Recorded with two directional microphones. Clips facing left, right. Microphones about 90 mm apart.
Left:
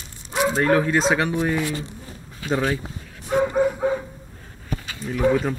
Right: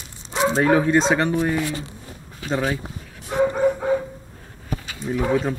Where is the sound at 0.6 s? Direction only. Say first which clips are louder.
Right 2 dB; 5° right (ahead or behind).